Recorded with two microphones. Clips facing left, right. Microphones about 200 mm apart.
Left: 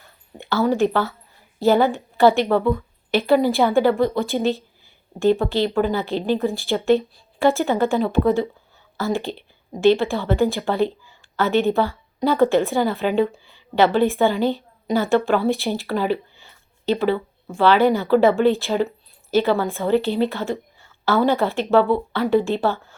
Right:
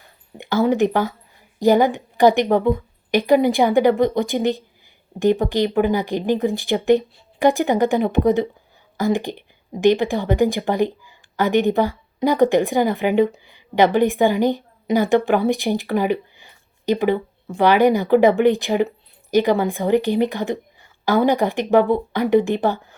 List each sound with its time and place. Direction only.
0.3 s speech: 15° right (ahead or behind)